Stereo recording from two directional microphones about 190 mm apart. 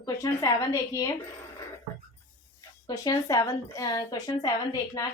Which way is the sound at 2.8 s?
20° left (ahead or behind).